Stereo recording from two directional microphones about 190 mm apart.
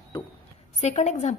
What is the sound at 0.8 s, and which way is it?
Speech, 35° left (ahead or behind).